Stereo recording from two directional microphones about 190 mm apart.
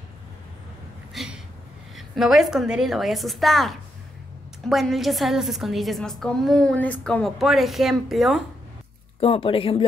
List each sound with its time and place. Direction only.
1.1 s a sound: centre (ahead or behind)
2.0 s a woman's voice: centre (ahead or behind)
9.2 s speech: 30° left (ahead or behind)